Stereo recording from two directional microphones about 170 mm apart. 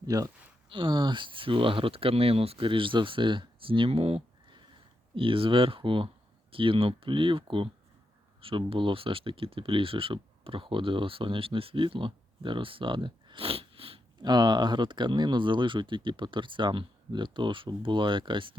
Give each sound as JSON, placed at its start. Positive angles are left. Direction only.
{"t": 0.0, "sound": "speech", "side_deg": -20}